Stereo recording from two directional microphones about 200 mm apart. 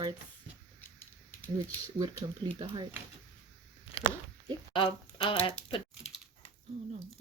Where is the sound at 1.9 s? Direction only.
20° right (ahead or behind).